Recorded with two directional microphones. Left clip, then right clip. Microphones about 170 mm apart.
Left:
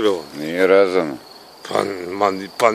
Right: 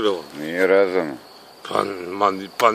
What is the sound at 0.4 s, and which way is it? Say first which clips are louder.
Speech: left 3 dB; 10° left (ahead or behind).